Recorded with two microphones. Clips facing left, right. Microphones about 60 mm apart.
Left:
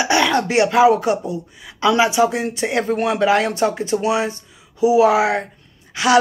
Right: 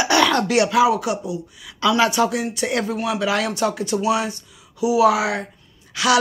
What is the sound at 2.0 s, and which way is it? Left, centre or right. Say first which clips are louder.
Speech: left 2 dB; left.